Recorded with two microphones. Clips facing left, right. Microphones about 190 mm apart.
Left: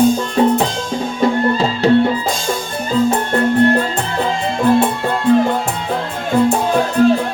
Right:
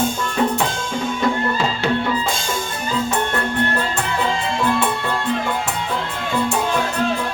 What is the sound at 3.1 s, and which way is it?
Music, 35° left (ahead or behind).